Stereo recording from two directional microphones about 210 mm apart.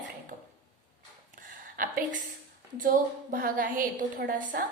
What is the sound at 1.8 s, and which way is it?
Speech, 40° right (ahead or behind).